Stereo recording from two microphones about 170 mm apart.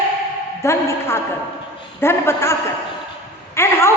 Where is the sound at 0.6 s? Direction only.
15° left (ahead or behind).